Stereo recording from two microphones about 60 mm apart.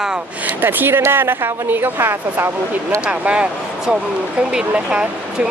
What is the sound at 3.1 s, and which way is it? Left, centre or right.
Speech, centre.